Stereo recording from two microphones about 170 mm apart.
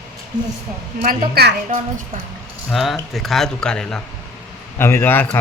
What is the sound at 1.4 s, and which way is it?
Speech, 65° right (ahead or behind).